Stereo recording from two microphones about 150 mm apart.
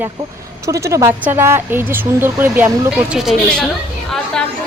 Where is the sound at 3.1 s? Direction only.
Centre (ahead or behind).